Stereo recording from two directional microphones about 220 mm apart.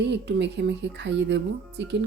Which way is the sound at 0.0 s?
50° right (ahead or behind).